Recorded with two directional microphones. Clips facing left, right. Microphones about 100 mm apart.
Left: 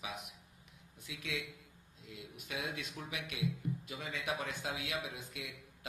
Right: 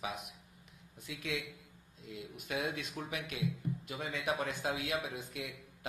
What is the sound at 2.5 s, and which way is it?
A man's voice, 50° right (ahead or behind).